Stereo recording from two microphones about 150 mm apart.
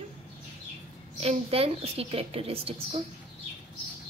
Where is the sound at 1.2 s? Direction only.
40° right (ahead or behind).